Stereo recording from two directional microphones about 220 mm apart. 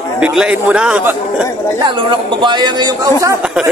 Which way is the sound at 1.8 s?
20° right (ahead or behind).